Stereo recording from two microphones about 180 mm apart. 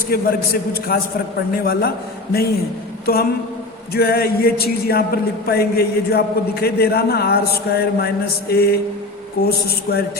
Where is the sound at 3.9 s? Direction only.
60° left (ahead or behind).